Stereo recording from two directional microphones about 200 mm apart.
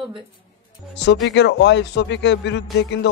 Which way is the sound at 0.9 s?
60° left (ahead or behind).